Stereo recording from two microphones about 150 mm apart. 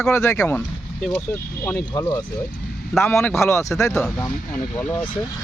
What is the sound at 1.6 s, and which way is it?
Speech, 15° left (ahead or behind).